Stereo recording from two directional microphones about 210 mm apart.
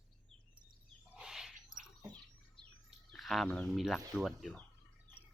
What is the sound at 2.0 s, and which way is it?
Bird, 20° right (ahead or behind).